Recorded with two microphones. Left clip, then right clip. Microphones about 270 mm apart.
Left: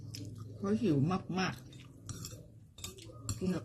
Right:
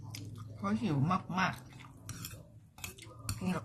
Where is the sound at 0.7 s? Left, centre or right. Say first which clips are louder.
Left 2 dB; right.